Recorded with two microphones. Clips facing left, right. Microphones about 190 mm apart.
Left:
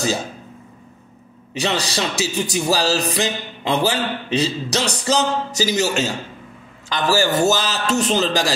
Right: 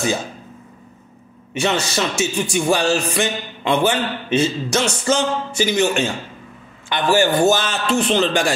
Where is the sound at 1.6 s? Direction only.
35° left (ahead or behind).